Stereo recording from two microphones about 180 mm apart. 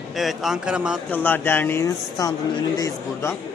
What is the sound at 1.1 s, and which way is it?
Speech, 10° left (ahead or behind).